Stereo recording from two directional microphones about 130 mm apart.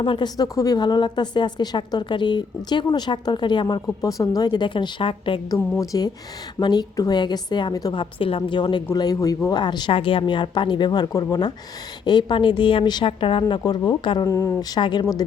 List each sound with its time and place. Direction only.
0.0 s speech: 35° left (ahead or behind)
5.5 s a woman's voice: 25° left (ahead or behind)
8.2 s speech: 40° left (ahead or behind)
14.3 s a woman's voice: 20° left (ahead or behind)
14.8 s speech: 35° left (ahead or behind)